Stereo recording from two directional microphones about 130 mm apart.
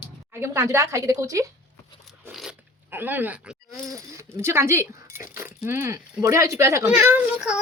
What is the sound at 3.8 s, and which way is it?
Speech, 25° right (ahead or behind).